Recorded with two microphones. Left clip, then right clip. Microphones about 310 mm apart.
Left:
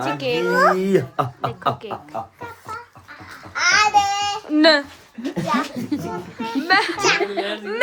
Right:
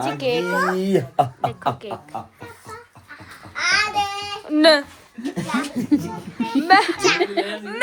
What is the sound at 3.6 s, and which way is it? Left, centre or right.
Babbling, left.